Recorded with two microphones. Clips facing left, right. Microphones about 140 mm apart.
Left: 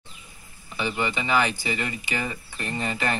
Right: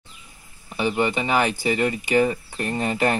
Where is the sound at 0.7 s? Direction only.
45° right (ahead or behind).